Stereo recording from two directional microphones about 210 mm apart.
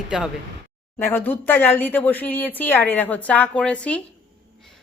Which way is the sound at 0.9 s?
10° left (ahead or behind).